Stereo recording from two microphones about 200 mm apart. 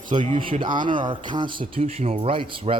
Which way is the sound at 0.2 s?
30° right (ahead or behind).